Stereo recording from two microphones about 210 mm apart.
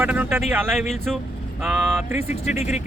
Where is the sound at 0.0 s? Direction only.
10° right (ahead or behind).